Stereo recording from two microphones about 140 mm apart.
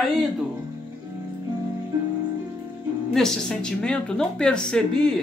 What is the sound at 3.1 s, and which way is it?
A woman's voice, 5° left (ahead or behind).